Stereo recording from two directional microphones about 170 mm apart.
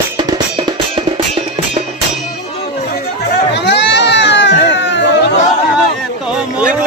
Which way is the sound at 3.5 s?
90° left.